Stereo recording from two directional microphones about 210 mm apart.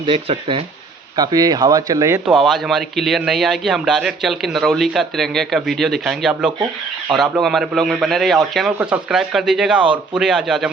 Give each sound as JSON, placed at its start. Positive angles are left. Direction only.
{"t": 0.0, "sound": "speech", "side_deg": -25}